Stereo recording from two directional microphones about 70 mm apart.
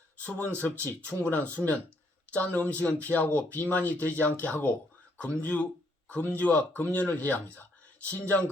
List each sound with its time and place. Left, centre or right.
0.3 s speech: left